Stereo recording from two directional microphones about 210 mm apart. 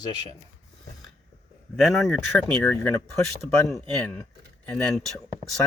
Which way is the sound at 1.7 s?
Centre (ahead or behind).